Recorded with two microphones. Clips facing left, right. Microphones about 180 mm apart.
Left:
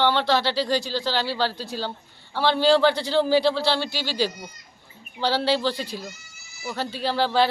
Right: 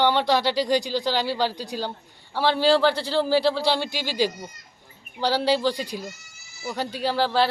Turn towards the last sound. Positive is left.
turn(degrees=-5)  # may be behind; listen again after turning